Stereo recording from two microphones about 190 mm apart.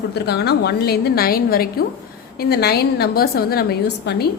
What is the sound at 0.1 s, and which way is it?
A woman's voice, 60° left (ahead or behind).